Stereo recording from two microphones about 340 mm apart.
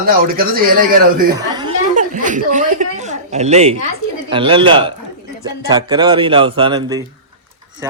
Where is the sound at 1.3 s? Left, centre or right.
Centre.